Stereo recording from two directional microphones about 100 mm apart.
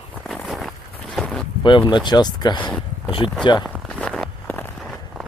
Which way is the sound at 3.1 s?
60° left (ahead or behind).